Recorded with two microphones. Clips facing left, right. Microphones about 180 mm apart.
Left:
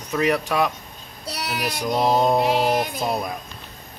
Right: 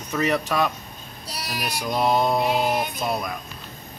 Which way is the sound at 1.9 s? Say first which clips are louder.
Left 2 dB; 25° left (ahead or behind).